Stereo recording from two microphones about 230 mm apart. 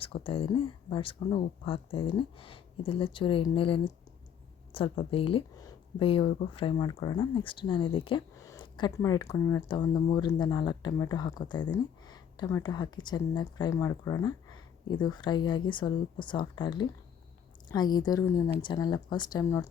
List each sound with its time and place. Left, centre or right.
0.0 s speech: left